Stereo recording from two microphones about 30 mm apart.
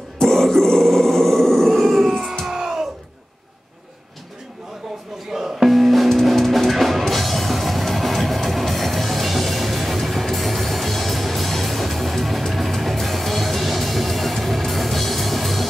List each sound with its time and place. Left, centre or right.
0.3 s grunt: centre
0.7 s a sound: centre
1.7 s dog: centre
2.5 s music: centre
5.3 s music: centre
5.7 s music: centre